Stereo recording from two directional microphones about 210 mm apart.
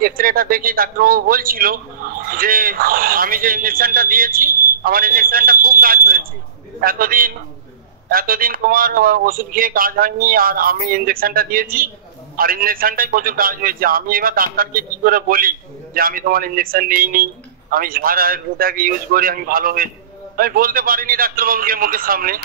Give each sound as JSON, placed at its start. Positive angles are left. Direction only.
{"t": 0.0, "sound": "a man's voice", "side_deg": -45}